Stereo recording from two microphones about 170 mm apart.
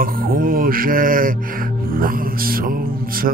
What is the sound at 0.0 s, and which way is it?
Music, 55° right (ahead or behind).